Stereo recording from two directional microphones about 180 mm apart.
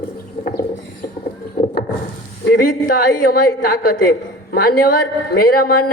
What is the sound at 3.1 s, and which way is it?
A woman's voice, 50° left (ahead or behind).